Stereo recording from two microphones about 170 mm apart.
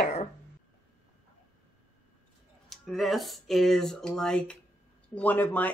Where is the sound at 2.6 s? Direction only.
Centre (ahead or behind).